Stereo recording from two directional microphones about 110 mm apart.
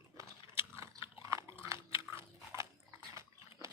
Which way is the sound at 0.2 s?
30° right (ahead or behind).